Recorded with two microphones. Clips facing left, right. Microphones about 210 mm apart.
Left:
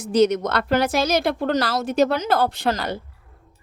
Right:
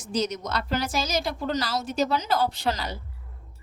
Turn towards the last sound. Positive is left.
turn(degrees=55)  # may be behind; listen again after turning